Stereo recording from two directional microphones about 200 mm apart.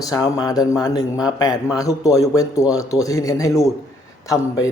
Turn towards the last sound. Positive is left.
turn(degrees=15)  # may be behind; listen again after turning